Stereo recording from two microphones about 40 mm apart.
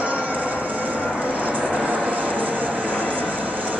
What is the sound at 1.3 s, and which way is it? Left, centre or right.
Vehicle, right.